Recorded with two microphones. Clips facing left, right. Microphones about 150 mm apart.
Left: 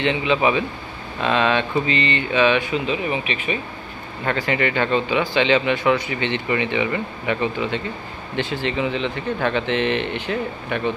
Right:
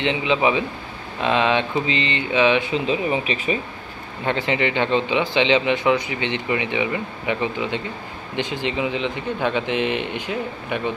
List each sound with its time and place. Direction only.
0.0 s speech: 15° right (ahead or behind)
4.3 s speech: 20° right (ahead or behind)